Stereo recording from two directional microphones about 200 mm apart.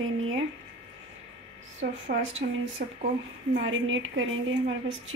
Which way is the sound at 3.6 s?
75° right (ahead or behind).